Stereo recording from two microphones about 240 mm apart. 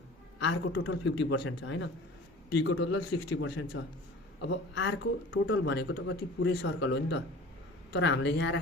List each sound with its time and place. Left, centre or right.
0.3 s a man's voice: left
7.9 s a man's voice: left